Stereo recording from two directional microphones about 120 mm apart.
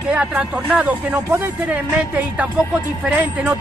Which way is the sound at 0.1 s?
10° right (ahead or behind).